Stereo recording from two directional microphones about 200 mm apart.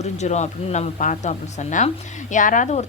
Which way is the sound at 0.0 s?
35° left (ahead or behind).